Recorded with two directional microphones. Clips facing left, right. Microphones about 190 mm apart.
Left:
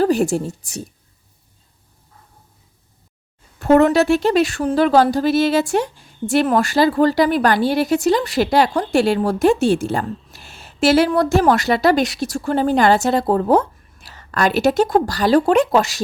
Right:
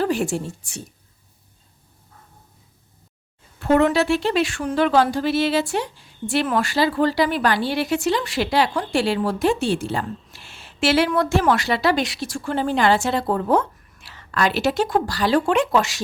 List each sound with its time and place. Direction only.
0.0 s a woman's voice: 40° left (ahead or behind)
3.6 s speech: 45° left (ahead or behind)